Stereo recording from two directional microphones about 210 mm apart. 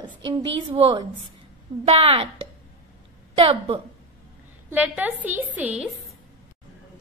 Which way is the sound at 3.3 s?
25° right (ahead or behind).